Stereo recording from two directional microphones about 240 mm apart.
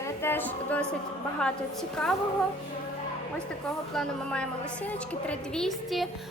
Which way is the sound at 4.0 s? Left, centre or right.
Centre.